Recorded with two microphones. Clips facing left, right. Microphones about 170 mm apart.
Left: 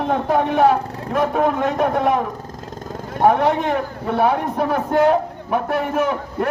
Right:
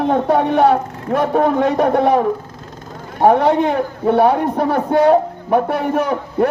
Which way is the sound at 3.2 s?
30° right (ahead or behind).